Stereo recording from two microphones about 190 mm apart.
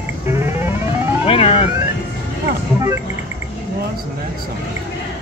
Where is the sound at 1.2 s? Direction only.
35° left (ahead or behind).